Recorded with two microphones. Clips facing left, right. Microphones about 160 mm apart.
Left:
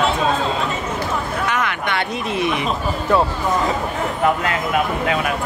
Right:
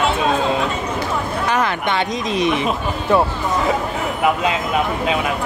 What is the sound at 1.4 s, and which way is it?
Speech, 30° right (ahead or behind).